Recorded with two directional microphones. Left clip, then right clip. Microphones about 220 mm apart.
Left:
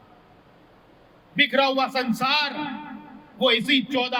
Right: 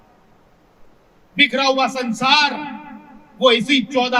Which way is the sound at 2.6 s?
50° right (ahead or behind).